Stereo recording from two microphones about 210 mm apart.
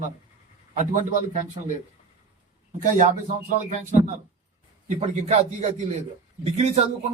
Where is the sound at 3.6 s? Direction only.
35° right (ahead or behind).